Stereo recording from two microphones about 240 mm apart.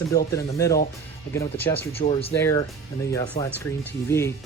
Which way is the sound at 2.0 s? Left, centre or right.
Left.